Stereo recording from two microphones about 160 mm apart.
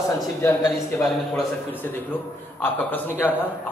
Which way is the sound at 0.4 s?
15° left (ahead or behind).